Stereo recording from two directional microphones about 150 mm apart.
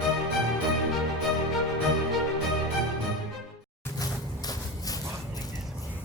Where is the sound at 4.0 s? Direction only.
25° left (ahead or behind).